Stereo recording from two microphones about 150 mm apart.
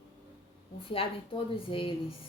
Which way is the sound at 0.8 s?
35° left (ahead or behind).